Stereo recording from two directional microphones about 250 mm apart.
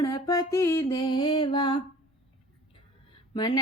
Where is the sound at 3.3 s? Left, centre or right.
Centre.